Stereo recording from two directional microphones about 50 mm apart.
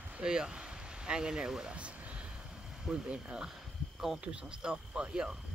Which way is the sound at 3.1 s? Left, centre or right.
Centre.